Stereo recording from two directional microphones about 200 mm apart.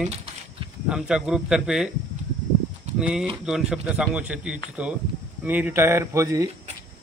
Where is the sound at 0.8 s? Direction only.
5° right (ahead or behind).